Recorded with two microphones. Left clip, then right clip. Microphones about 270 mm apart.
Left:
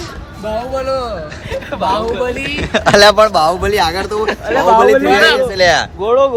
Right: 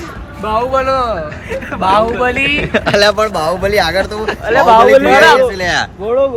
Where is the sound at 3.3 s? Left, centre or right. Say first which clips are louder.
Left 1 dB; centre.